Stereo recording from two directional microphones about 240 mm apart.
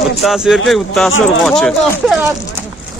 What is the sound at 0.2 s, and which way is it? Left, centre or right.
Speech, centre.